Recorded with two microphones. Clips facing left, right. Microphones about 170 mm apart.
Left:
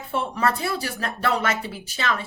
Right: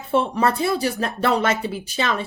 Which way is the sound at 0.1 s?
25° right (ahead or behind).